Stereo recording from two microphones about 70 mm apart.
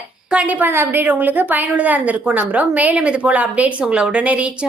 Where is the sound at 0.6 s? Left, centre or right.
Right.